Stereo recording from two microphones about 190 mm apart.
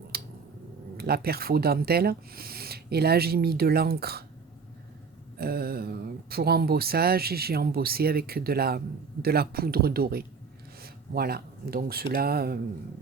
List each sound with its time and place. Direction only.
0.1 s a sound: 55° right (ahead or behind)
0.9 s speech: 55° right (ahead or behind)
5.4 s speech: 55° right (ahead or behind)